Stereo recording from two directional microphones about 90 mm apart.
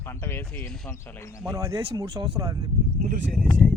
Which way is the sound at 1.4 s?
40° right (ahead or behind).